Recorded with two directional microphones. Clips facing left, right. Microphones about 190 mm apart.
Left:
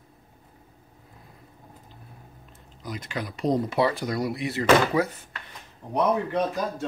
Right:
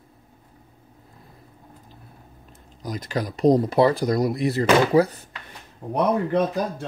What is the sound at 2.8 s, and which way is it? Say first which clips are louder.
Speech: right 5 dB; 40° right (ahead or behind).